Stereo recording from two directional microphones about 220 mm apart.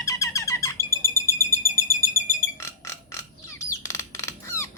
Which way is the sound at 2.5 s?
15° left (ahead or behind).